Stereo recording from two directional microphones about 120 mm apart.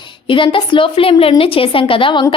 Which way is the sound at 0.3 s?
45° left (ahead or behind).